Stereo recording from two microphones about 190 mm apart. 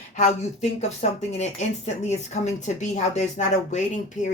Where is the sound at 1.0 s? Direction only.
35° left (ahead or behind).